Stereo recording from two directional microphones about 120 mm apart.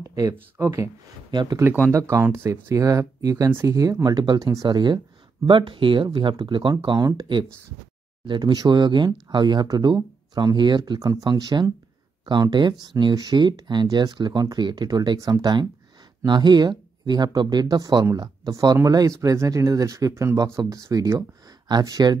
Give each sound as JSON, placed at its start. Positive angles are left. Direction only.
{"t": 0.0, "sound": "speech", "side_deg": -25}
{"t": 1.3, "sound": "speech", "side_deg": -40}
{"t": 1.6, "sound": "speech", "side_deg": -20}
{"t": 8.3, "sound": "speech", "side_deg": -35}